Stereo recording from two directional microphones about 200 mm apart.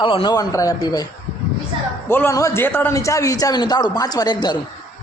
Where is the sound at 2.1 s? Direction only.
10° left (ahead or behind).